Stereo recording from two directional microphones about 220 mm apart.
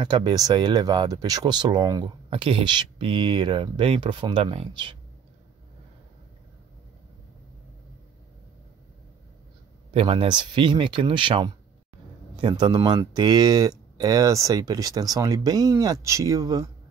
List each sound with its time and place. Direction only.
0.0 s speech: 20° right (ahead or behind)
9.9 s speech: 20° right (ahead or behind)